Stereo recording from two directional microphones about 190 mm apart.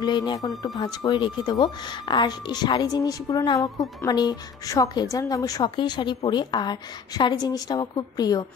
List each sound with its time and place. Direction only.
0.0 s speech: 20° left (ahead or behind)